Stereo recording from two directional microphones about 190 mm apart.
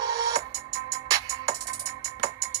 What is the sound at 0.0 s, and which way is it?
Music, 20° right (ahead or behind).